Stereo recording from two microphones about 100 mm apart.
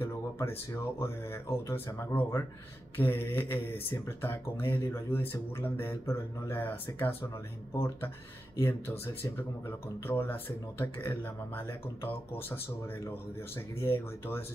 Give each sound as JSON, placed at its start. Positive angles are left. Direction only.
{"t": 0.0, "sound": "speech", "side_deg": 25}